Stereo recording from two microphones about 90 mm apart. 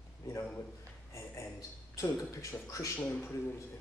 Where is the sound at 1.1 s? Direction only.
30° left (ahead or behind).